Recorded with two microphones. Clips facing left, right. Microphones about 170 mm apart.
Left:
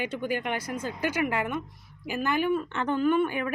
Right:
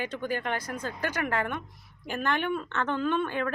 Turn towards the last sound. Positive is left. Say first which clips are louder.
# left 3 dB
turn(degrees=10)  # may be behind; listen again after turning